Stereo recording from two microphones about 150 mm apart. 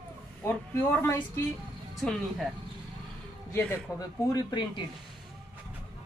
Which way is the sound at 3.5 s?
15° left (ahead or behind).